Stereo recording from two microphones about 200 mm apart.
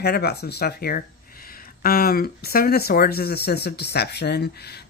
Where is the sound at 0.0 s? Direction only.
55° left (ahead or behind).